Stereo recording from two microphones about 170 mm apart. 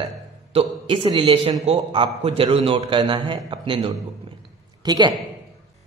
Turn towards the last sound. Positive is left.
turn(degrees=-25)  # may be behind; listen again after turning